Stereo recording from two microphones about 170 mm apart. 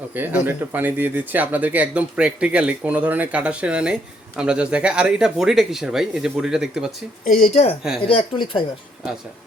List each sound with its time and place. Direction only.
0.1 s speech: 10° right (ahead or behind)
7.5 s speech: 40° left (ahead or behind)